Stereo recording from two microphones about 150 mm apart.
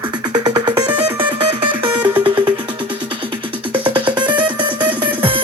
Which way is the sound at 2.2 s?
30° right (ahead or behind).